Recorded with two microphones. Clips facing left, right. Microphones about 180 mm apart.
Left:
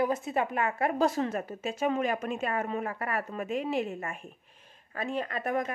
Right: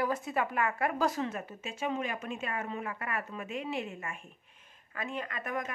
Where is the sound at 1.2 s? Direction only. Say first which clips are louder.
Left 5 dB; 40° left (ahead or behind).